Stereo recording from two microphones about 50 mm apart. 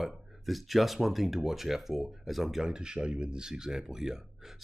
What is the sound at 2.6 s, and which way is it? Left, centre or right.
Speech, centre.